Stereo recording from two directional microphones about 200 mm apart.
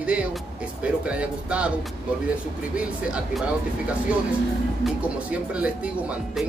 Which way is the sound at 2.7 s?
5° right (ahead or behind).